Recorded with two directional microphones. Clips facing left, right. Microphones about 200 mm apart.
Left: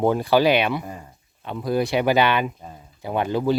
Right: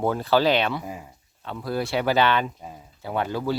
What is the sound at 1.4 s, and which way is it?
Speech, 15° left (ahead or behind).